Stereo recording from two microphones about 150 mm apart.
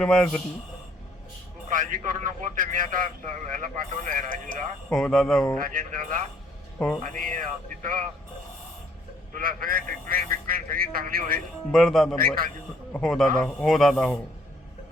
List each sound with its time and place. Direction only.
0.0 s speech: 5° left (ahead or behind)
1.7 s a man's voice: 65° right (ahead or behind)
4.9 s speech: 5° left (ahead or behind)
5.5 s a man's voice: 65° right (ahead or behind)
6.7 s speech: 5° left (ahead or behind)
7.0 s a man's voice: 60° right (ahead or behind)
9.3 s a man's voice: 70° right (ahead or behind)
11.7 s speech: centre (ahead or behind)